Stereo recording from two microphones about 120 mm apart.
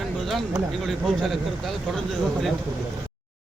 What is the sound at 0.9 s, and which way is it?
Speech, centre (ahead or behind).